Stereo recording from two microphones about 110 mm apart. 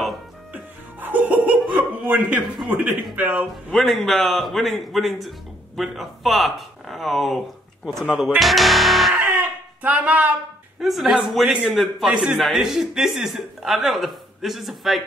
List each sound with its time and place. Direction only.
1.0 s music: 15° right (ahead or behind)
2.0 s a man's voice: 15° right (ahead or behind)
3.7 s speech: centre (ahead or behind)
9.8 s a man's voice: 15° right (ahead or behind)
10.8 s speech: centre (ahead or behind)